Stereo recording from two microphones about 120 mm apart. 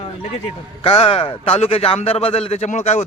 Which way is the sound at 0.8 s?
50° left (ahead or behind).